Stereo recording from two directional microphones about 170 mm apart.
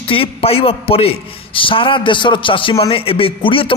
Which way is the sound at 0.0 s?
30° left (ahead or behind).